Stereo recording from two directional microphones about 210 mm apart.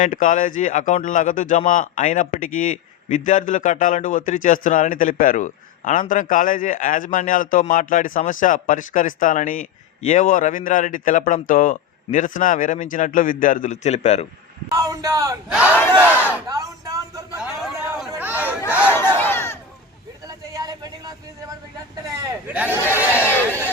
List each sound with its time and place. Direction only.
0.0 s a man's voice: 40° left (ahead or behind)
14.7 s a man's voice: 15° right (ahead or behind)
15.4 s speech: 5° right (ahead or behind)
16.5 s a sound: 15° right (ahead or behind)
18.1 s chatter: 10° right (ahead or behind)
18.7 s speech: 10° right (ahead or behind)
19.1 s a sound: 10° left (ahead or behind)
20.5 s a sound: 15° right (ahead or behind)
22.4 s speech: 5° right (ahead or behind)
23.3 s crowd: 10° left (ahead or behind)